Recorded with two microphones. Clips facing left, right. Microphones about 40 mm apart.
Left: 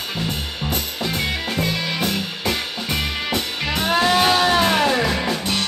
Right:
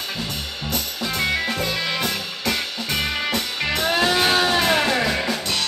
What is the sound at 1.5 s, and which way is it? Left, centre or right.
Music, centre.